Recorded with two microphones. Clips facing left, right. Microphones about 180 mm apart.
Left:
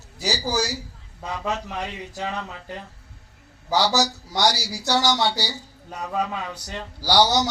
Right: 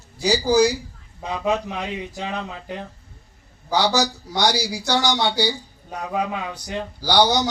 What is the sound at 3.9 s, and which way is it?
Speech, 15° right (ahead or behind).